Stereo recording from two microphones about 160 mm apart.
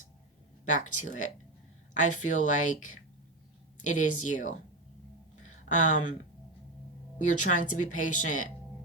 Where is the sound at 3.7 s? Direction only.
50° left (ahead or behind).